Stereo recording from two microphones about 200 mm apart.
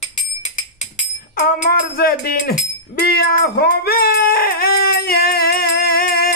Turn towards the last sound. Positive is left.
turn(degrees=50)  # may be behind; listen again after turning